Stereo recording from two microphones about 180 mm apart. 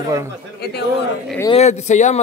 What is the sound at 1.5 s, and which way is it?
Speech, 40° left (ahead or behind).